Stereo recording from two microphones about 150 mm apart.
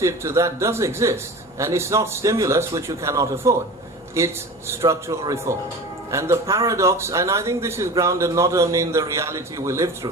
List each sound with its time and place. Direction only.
0.0 s speech: 20° right (ahead or behind)